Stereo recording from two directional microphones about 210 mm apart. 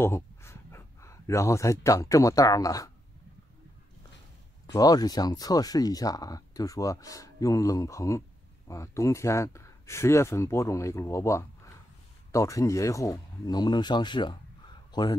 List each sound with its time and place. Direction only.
0.0 s speech: 10° left (ahead or behind)
4.7 s speech: 20° left (ahead or behind)